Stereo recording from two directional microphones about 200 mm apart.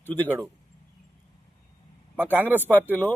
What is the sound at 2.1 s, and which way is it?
Speech, 10° right (ahead or behind).